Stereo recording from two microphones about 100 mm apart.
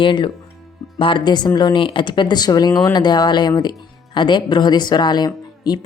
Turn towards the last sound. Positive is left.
turn(degrees=45)  # may be behind; listen again after turning